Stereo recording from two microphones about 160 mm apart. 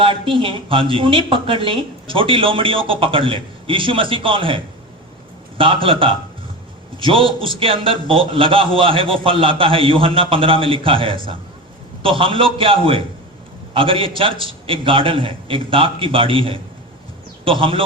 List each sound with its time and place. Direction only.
0.0 s a man's voice: 35° right (ahead or behind)